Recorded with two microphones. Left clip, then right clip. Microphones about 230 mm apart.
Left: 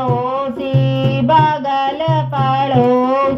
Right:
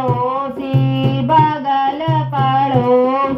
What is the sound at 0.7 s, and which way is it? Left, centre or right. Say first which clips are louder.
Music: left 1 dB; left.